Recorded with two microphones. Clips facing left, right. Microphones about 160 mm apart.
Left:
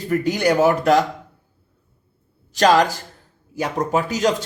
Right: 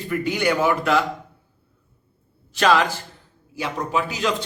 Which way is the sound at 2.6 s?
40° left (ahead or behind).